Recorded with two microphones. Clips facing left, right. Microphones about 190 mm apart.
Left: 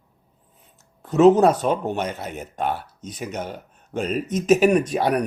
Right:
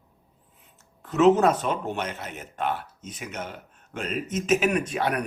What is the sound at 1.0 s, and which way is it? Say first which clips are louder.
Speech: left 4 dB; 35° left (ahead or behind).